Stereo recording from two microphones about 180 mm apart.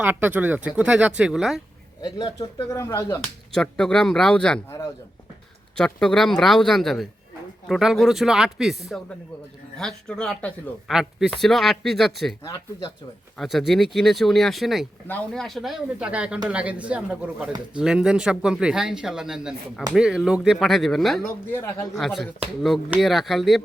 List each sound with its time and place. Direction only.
0.0 s speech: 10° right (ahead or behind)
2.0 s speech: 20° left (ahead or behind)
3.5 s a man's voice: 5° left (ahead or behind)
12.5 s speech: 20° left (ahead or behind)
13.3 s a man's voice: centre (ahead or behind)
21.5 s speech: 15° left (ahead or behind)
21.9 s a man's voice: centre (ahead or behind)